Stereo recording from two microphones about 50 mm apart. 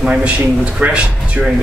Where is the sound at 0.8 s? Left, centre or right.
Right.